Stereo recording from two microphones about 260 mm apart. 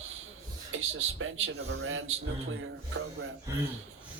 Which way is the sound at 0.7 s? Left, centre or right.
Right.